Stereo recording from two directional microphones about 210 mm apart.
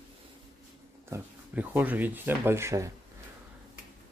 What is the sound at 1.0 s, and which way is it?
Speech, 10° right (ahead or behind).